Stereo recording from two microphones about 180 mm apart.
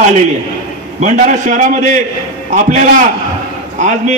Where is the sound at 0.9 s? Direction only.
40° right (ahead or behind).